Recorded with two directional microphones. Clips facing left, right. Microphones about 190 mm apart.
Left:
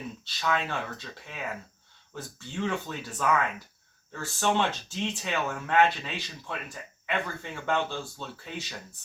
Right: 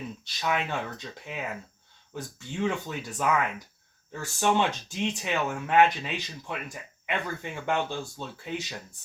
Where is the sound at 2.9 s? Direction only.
15° right (ahead or behind).